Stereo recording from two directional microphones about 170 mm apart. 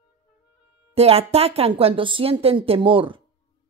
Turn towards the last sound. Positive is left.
turn(degrees=-30)  # may be behind; listen again after turning